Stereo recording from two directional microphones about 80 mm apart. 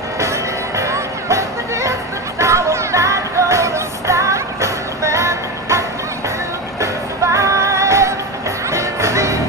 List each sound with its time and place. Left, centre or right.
0.2 s music: right